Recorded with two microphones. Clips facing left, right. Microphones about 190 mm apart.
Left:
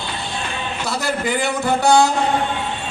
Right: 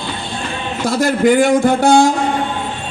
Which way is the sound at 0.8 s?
50° right (ahead or behind).